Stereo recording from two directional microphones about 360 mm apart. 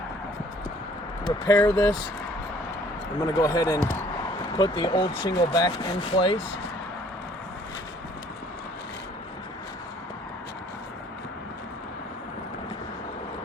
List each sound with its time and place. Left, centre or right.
1.2 s speech: centre
3.2 s speech: centre